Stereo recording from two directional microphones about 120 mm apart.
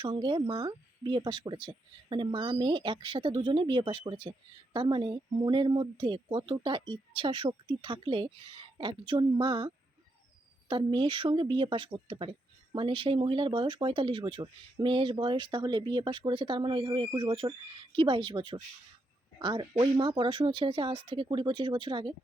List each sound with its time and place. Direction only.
0.0 s speech: 40° right (ahead or behind)